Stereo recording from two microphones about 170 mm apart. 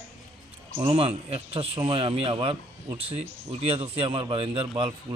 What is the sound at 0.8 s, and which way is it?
Speech, 35° right (ahead or behind).